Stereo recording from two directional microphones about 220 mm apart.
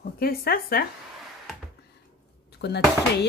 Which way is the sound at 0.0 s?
45° left (ahead or behind).